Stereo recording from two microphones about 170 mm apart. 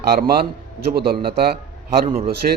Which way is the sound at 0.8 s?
70° right (ahead or behind).